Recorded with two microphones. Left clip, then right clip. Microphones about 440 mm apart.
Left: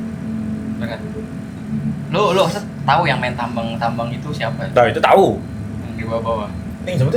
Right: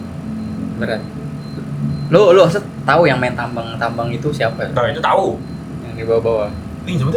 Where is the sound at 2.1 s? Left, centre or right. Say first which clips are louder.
Right 7 dB; right.